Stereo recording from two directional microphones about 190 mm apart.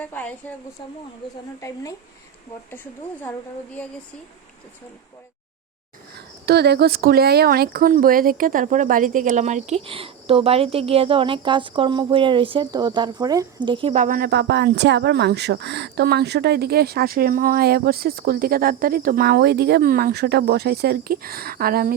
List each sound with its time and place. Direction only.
0.0 s a woman's voice: 10° left (ahead or behind)
1.6 s a woman's voice: 20° left (ahead or behind)
6.1 s speech: 60° right (ahead or behind)